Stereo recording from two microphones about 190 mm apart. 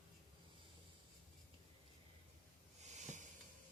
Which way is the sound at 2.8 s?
40° right (ahead or behind).